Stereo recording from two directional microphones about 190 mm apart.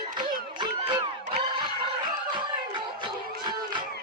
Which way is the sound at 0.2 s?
25° right (ahead or behind).